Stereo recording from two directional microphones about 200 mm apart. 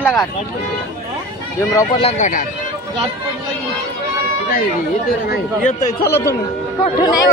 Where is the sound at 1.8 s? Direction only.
25° left (ahead or behind).